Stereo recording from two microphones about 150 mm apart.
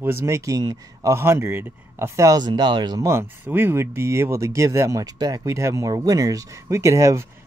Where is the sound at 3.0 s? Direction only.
15° right (ahead or behind).